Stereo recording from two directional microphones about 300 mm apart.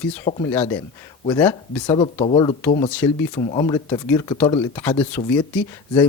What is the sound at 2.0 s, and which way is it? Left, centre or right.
Speech, centre.